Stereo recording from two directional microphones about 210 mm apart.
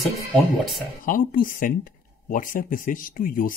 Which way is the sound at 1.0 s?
40° left (ahead or behind).